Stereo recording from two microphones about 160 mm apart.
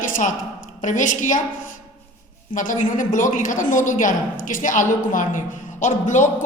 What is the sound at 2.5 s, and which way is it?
A woman's voice, 55° left (ahead or behind).